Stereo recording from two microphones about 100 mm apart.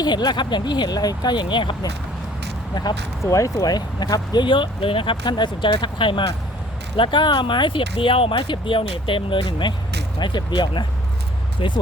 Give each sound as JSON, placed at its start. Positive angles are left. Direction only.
{"t": 0.0, "sound": "speech", "side_deg": 45}
{"t": 3.2, "sound": "speech", "side_deg": 35}
{"t": 5.2, "sound": "speech", "side_deg": 50}